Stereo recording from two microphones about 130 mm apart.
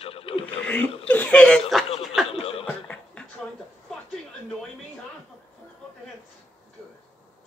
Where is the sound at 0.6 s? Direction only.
15° left (ahead or behind).